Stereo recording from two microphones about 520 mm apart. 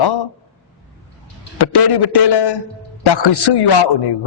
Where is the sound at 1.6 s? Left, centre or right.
Left.